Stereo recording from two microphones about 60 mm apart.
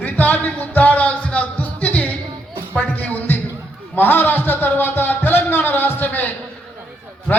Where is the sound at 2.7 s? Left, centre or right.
Left.